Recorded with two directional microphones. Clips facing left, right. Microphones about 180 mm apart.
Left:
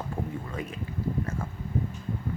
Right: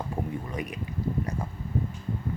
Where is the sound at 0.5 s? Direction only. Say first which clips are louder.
Right 1 dB; 15° right (ahead or behind).